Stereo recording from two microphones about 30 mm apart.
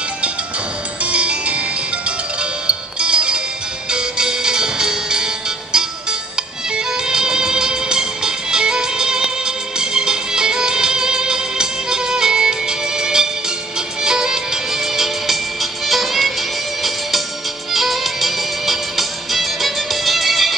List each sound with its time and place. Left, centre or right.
1.0 s music: right
2.6 s music: right
7.1 s music: right
15.9 s music: centre
17.7 s music: centre